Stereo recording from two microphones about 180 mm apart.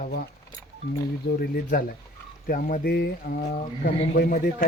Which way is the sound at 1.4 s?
50° left (ahead or behind).